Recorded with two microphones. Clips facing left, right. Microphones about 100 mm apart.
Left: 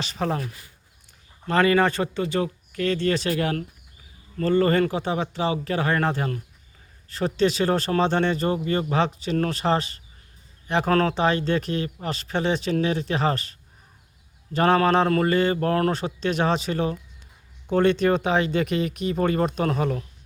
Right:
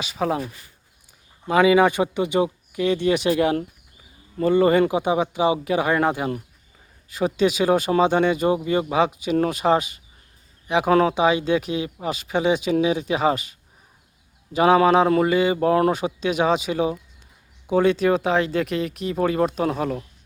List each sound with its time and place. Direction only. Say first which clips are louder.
0.0 s speech: right 3 dB; 5° right (ahead or behind)
1.5 s speech: right 3 dB; 10° right (ahead or behind)